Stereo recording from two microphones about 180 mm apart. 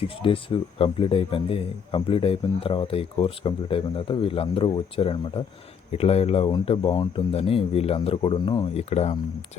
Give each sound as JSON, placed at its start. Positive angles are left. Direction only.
{"t": 0.2, "sound": "speech", "side_deg": 30}